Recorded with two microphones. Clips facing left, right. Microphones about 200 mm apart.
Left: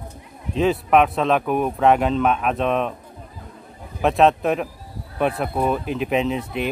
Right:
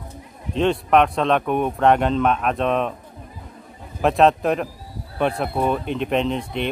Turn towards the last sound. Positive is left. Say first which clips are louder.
# even
turn(degrees=5)  # may be behind; listen again after turning